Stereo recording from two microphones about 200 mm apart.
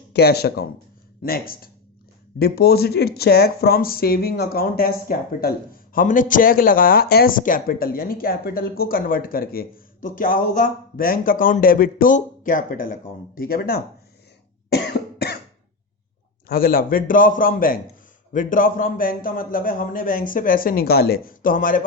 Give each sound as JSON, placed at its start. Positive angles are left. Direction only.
{"t": 0.1, "sound": "speech", "side_deg": 55}
{"t": 14.7, "sound": "cough", "side_deg": 55}
{"t": 16.5, "sound": "speech", "side_deg": 45}